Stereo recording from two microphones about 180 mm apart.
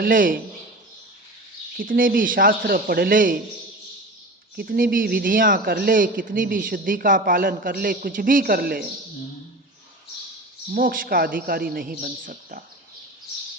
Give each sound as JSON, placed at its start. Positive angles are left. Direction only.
{"t": 0.0, "sound": "a man's voice", "side_deg": -50}
{"t": 1.8, "sound": "a man's voice", "side_deg": -50}
{"t": 4.5, "sound": "a man's voice", "side_deg": -60}
{"t": 10.7, "sound": "a man's voice", "side_deg": -50}